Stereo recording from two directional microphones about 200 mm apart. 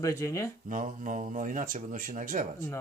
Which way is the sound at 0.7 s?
40° right (ahead or behind).